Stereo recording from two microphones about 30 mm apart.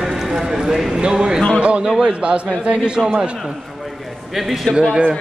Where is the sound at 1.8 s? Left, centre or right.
Right.